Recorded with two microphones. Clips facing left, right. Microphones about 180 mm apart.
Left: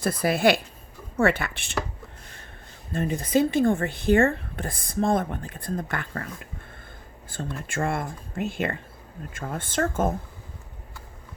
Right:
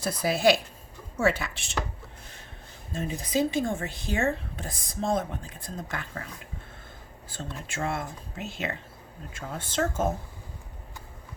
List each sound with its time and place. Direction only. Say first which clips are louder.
0.0 s speech: left 2 dB; 55° left (ahead or behind)
2.9 s speech: left 5 dB; 60° left (ahead or behind)
7.3 s speech: left 5 dB; 50° left (ahead or behind)